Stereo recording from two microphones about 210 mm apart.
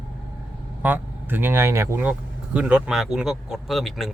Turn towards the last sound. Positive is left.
turn(degrees=0)  # may be behind; listen again after turning